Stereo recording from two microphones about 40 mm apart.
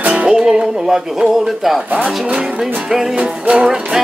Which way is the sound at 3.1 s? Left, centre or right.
Right.